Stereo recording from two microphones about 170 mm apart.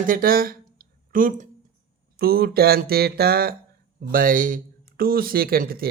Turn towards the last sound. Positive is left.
turn(degrees=-60)  # may be behind; listen again after turning